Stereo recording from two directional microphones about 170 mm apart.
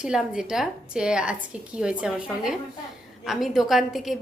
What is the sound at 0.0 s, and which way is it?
A woman's voice, 5° right (ahead or behind).